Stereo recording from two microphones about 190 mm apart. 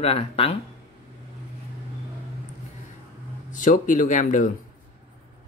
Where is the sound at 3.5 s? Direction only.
45° left (ahead or behind).